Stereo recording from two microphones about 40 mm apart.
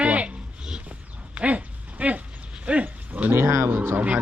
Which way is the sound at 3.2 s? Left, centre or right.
Right.